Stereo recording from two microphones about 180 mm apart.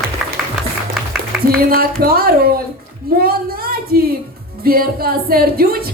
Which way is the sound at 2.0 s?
55° right (ahead or behind).